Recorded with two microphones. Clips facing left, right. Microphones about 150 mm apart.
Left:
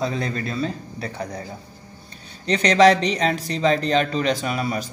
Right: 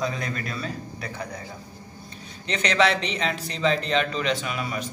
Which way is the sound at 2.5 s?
35° left (ahead or behind).